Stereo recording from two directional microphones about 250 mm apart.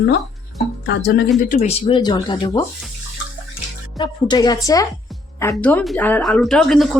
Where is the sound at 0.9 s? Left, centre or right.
Left.